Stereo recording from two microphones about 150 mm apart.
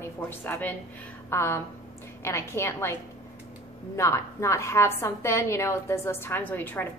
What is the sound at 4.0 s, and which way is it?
A woman's voice, 20° left (ahead or behind).